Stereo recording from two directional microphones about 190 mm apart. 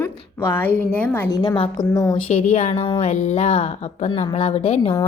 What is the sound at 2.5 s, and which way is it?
Speech, 35° left (ahead or behind).